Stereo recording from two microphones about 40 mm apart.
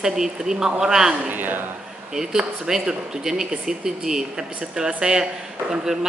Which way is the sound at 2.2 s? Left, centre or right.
Centre.